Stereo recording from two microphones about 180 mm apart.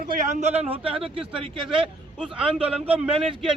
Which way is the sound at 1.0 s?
30° right (ahead or behind).